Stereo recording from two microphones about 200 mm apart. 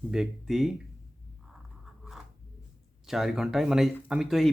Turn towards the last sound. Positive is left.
turn(degrees=0)  # may be behind; listen again after turning